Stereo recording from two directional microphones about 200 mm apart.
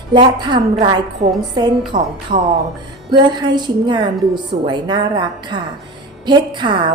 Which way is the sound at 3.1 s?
20° right (ahead or behind).